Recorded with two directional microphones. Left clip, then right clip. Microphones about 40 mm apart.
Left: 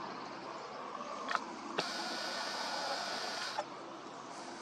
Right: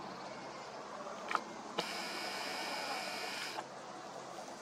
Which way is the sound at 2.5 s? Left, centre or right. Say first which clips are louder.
Left 2 dB; right.